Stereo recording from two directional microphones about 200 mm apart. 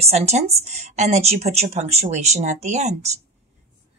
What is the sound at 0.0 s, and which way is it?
Speech, 30° right (ahead or behind).